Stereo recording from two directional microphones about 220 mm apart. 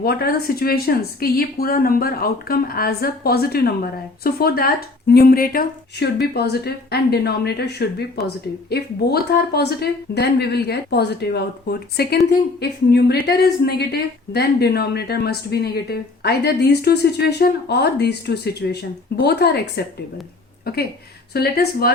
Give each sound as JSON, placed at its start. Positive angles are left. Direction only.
{"t": 0.0, "sound": "speech", "side_deg": 45}